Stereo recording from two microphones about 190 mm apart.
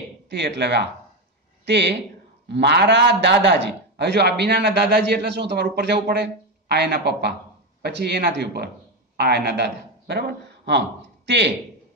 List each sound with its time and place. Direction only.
0.3 s a man's voice: 60° right (ahead or behind)